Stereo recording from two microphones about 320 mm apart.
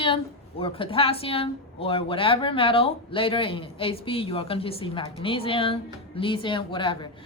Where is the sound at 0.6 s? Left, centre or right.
Centre.